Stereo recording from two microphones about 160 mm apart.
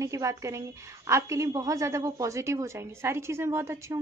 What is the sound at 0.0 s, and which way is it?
A woman's voice, 20° right (ahead or behind).